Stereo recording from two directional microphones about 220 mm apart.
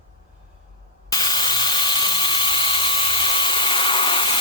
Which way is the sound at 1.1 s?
20° left (ahead or behind).